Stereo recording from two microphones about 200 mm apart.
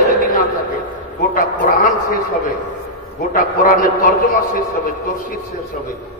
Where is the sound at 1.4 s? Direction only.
40° left (ahead or behind).